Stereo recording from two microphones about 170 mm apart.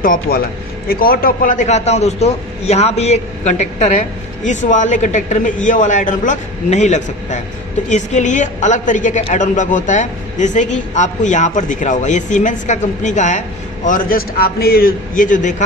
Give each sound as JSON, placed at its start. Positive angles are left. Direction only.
{"t": 0.0, "sound": "a man's voice", "side_deg": 55}